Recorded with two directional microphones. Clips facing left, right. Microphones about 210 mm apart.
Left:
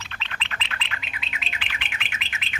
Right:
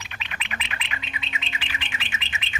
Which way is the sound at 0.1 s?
15° right (ahead or behind).